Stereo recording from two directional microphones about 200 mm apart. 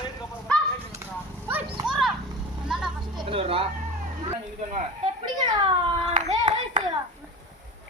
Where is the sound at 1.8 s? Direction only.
Centre (ahead or behind).